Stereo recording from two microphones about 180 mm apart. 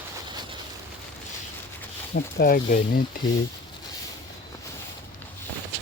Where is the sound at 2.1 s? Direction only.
55° left (ahead or behind).